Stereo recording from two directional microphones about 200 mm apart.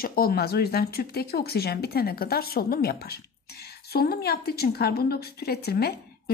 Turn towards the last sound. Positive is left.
turn(degrees=50)  # may be behind; listen again after turning